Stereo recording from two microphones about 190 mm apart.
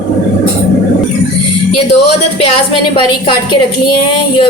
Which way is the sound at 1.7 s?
30° left (ahead or behind).